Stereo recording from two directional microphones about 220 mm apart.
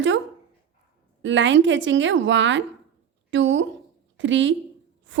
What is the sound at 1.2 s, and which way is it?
A woman's voice, 55° right (ahead or behind).